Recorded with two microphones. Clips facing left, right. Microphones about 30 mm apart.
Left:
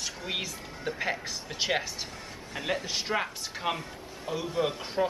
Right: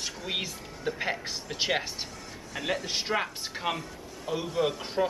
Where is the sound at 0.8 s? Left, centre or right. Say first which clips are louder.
Right 1 dB; centre.